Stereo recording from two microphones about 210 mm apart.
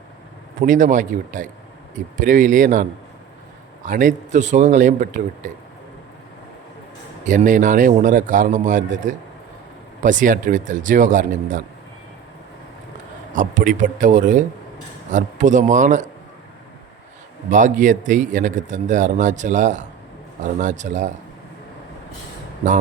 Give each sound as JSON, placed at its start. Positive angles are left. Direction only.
{"t": 0.6, "sound": "a man's voice", "side_deg": -40}
{"t": 3.8, "sound": "a man's voice", "side_deg": -40}
{"t": 7.3, "sound": "a man's voice", "side_deg": -40}
{"t": 13.3, "sound": "a man's voice", "side_deg": -40}
{"t": 17.5, "sound": "a man's voice", "side_deg": -35}